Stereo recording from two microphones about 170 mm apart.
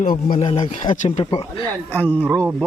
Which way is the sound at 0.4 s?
45° left (ahead or behind).